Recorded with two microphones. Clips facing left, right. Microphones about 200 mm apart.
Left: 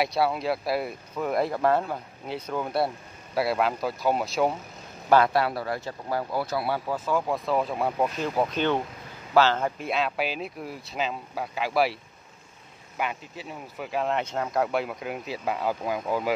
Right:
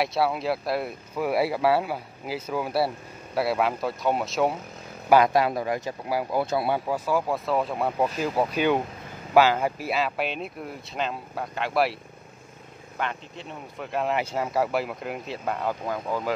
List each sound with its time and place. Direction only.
0.0 s speech: centre (ahead or behind)
5.1 s speech: 15° right (ahead or behind)
6.4 s speech: 25° right (ahead or behind); by 16.3 s 10° left (ahead or behind)